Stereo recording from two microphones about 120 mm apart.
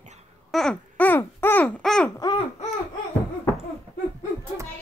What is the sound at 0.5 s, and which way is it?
Babbling, 5° left (ahead or behind).